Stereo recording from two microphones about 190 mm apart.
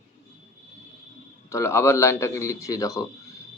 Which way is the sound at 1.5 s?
15° left (ahead or behind).